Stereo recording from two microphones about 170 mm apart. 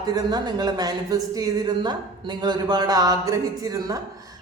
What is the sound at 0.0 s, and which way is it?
A woman's voice, 25° right (ahead or behind).